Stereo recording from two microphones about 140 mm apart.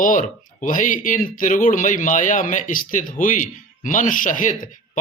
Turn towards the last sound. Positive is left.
turn(degrees=65)  # may be behind; listen again after turning